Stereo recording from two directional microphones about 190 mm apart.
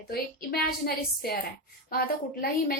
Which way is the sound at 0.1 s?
55° left (ahead or behind).